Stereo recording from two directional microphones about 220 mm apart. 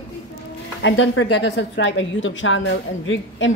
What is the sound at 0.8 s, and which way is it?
A woman's voice, 60° left (ahead or behind).